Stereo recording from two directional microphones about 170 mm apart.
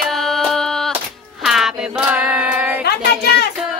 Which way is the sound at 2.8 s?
70° left (ahead or behind).